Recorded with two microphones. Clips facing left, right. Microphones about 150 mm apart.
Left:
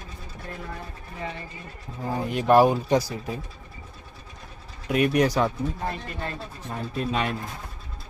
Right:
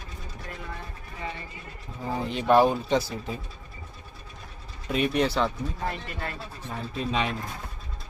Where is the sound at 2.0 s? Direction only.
5° left (ahead or behind).